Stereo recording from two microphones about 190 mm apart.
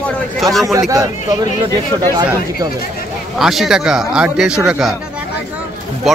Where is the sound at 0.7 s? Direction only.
15° right (ahead or behind).